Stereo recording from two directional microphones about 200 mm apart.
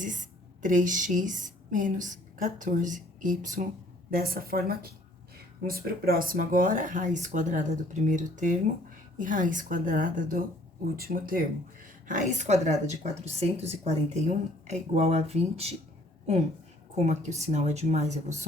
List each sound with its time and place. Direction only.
0.6 s a woman's voice: 40° right (ahead or behind)
16.9 s a woman's voice: 35° right (ahead or behind)